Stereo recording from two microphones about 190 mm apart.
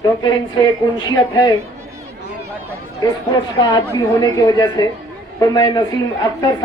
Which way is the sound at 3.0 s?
20° left (ahead or behind).